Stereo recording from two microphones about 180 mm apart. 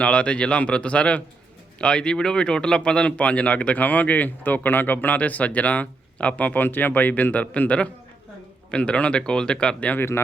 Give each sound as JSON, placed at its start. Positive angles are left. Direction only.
{"t": 0.0, "sound": "speech", "side_deg": 5}